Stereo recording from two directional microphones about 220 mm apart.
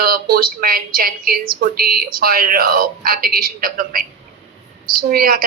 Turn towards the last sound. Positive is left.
turn(degrees=-40)  # may be behind; listen again after turning